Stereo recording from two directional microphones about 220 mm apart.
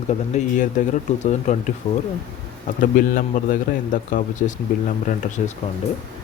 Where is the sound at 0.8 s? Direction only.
35° left (ahead or behind).